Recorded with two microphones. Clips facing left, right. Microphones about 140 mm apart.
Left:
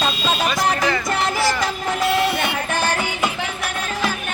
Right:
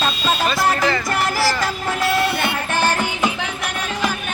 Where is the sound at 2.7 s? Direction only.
10° right (ahead or behind).